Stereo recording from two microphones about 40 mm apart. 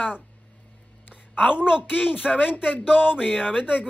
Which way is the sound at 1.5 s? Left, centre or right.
Centre.